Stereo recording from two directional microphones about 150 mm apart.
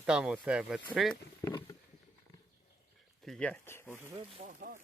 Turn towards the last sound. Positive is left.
turn(degrees=15)  # may be behind; listen again after turning